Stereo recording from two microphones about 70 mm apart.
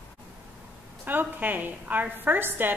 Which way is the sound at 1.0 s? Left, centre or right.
Right.